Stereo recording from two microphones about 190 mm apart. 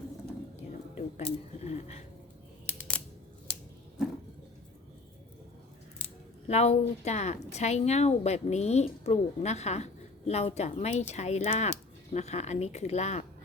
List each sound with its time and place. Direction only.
0.9 s speech: 35° left (ahead or behind)
2.6 s a sound: 5° left (ahead or behind)
6.5 s speech: 35° left (ahead or behind)